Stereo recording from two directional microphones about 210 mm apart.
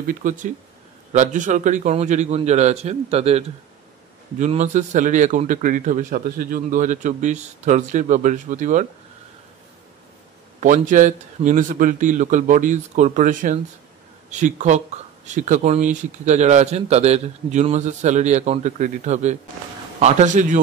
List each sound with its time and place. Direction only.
0.0 s a man's voice: 40° right (ahead or behind)
10.6 s a man's voice: 35° right (ahead or behind)